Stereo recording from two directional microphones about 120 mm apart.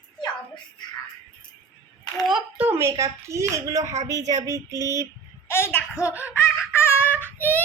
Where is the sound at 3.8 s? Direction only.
85° right.